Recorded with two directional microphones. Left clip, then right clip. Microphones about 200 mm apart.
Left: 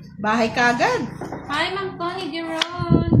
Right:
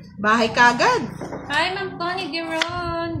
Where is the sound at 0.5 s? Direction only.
35° right (ahead or behind).